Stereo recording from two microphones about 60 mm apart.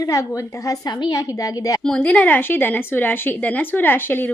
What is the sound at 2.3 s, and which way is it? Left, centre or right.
A woman's voice, left.